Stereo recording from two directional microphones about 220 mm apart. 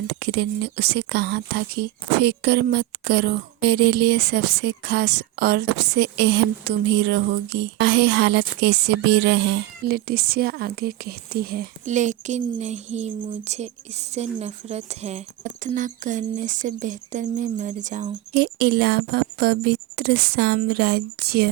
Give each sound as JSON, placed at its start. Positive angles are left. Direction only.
{"t": 0.1, "sound": "a woman's voice", "side_deg": -50}
{"t": 18.3, "sound": "a woman's voice", "side_deg": -45}